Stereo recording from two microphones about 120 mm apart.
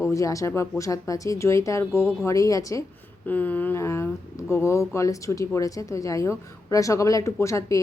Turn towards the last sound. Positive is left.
turn(degrees=25)  # may be behind; listen again after turning